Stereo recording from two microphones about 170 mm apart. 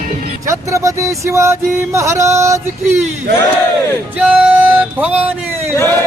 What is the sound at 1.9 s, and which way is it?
Music, 15° right (ahead or behind).